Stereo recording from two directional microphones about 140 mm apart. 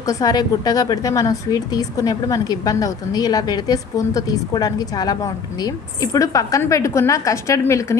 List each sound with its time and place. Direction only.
0.0 s a woman's voice: 25° left (ahead or behind)